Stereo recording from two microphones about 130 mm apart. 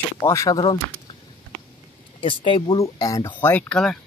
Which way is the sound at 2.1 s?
40° left (ahead or behind).